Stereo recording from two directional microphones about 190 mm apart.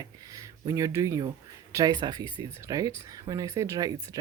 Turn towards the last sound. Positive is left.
turn(degrees=-20)  # may be behind; listen again after turning